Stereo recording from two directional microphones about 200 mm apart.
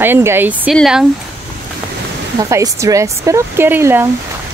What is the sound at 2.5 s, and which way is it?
Speech, 15° right (ahead or behind).